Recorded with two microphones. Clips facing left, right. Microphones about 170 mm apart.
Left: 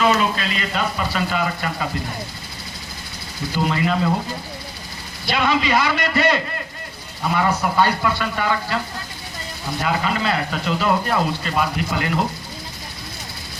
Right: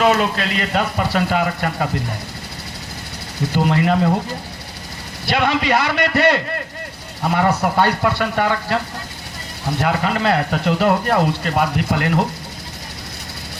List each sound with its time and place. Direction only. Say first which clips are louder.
0.0 s speech: right 2 dB; 65° right (ahead or behind)
3.5 s speech: right 4 dB; 60° right (ahead or behind)
5.2 s speech: right 2 dB; 65° right (ahead or behind)
9.8 s speech: right 3 dB; 60° right (ahead or behind)